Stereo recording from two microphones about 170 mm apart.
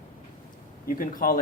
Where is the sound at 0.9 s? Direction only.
55° left (ahead or behind).